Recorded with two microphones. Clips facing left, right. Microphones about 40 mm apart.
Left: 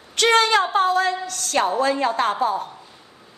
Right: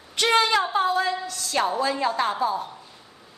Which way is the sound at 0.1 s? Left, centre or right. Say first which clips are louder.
Left 4 dB; left.